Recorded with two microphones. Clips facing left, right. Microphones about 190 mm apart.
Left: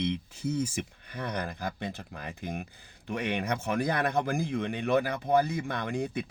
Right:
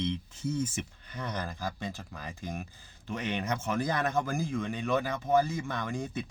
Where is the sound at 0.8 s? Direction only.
60° left (ahead or behind).